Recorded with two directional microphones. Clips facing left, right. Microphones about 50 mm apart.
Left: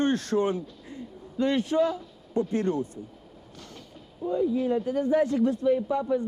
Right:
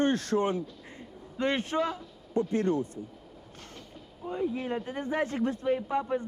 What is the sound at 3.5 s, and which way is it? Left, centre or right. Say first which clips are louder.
Train: left 3 dB; right.